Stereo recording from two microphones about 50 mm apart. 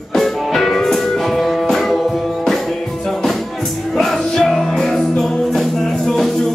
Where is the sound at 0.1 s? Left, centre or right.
Centre.